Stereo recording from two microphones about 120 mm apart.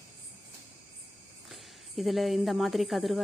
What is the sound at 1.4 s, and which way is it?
A woman's voice, centre (ahead or behind).